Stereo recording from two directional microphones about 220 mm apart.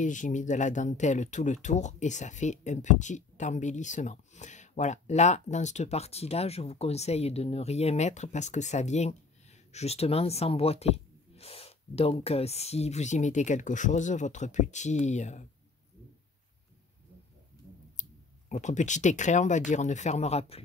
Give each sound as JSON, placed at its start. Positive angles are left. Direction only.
{"t": 0.0, "sound": "speech", "side_deg": 35}
{"t": 18.5, "sound": "speech", "side_deg": 35}